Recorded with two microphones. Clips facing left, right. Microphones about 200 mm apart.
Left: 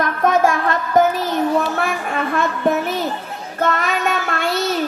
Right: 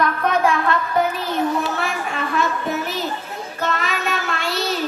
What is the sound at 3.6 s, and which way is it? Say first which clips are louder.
Child singing: left 5 dB; 50° left (ahead or behind).